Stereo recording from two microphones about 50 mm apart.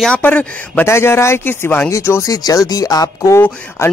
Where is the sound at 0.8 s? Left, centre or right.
Left.